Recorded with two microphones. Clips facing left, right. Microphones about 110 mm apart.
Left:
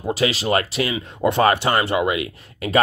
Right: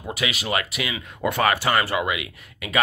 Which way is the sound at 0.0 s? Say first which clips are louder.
Left 7 dB; 30° left (ahead or behind).